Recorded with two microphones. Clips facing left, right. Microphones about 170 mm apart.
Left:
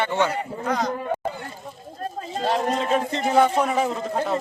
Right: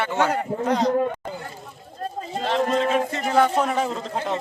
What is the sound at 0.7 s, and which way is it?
Speech, 30° right (ahead or behind).